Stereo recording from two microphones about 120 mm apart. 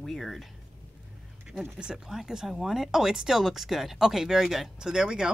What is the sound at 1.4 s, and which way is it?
Speech, 5° right (ahead or behind).